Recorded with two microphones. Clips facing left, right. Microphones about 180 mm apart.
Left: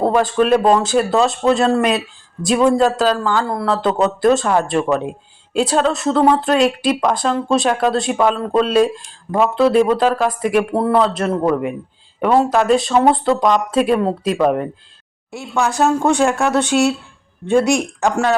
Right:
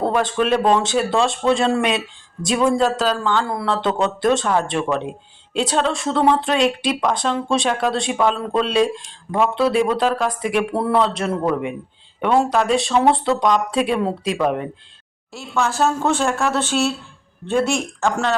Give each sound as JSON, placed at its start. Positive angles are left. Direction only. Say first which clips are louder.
{"t": 0.0, "sound": "speech", "louder": "left 4 dB", "side_deg": 0}
{"t": 15.4, "sound": "speech", "louder": "left 3 dB", "side_deg": 15}
{"t": 17.7, "sound": "speech", "louder": "left 4 dB", "side_deg": 15}